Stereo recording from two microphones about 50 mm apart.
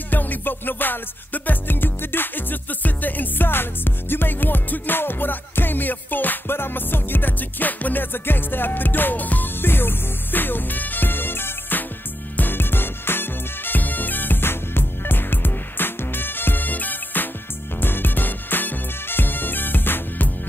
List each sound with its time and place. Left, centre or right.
0.1 s music: left